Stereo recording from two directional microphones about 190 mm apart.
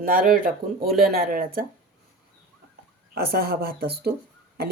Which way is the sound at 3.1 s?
55° right (ahead or behind).